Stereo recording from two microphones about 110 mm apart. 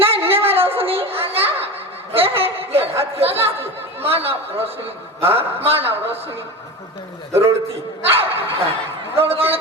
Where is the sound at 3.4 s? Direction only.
65° right (ahead or behind).